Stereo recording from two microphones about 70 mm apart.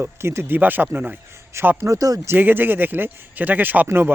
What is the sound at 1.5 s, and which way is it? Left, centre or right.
Speech, right.